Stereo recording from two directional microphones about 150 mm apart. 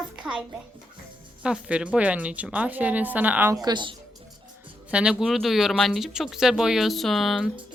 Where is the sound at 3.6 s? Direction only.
30° right (ahead or behind).